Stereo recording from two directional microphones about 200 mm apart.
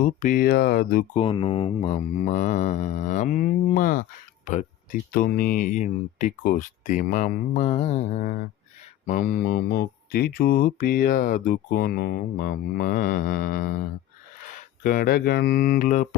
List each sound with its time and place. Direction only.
0.0 s mantra: 40° left (ahead or behind)
1.1 s speech: 25° left (ahead or behind)
9.0 s mantra: 40° left (ahead or behind)
14.5 s speech: 45° left (ahead or behind)